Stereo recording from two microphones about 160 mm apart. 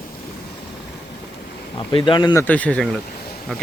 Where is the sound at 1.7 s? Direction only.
30° left (ahead or behind).